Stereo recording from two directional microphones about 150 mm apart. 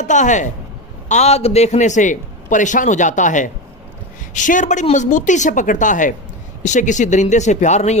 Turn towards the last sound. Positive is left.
turn(degrees=50)  # may be behind; listen again after turning